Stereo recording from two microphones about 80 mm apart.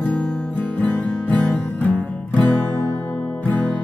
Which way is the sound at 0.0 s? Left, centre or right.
Centre.